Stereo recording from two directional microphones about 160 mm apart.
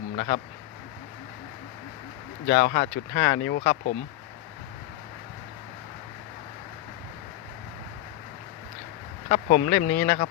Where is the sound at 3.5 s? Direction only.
75° left (ahead or behind).